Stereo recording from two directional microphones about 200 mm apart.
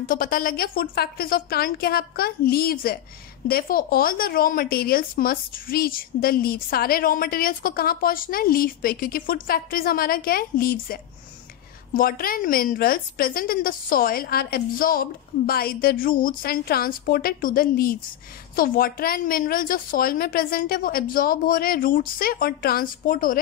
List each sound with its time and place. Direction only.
0.1 s speech: 45° left (ahead or behind)